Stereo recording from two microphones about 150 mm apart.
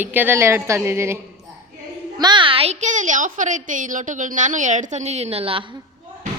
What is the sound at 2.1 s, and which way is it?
A woman's voice, 30° right (ahead or behind).